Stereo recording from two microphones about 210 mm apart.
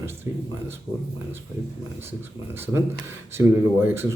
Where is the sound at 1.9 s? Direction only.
10° right (ahead or behind).